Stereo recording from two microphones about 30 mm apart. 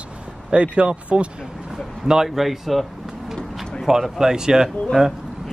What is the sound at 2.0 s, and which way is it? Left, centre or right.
Speech, centre.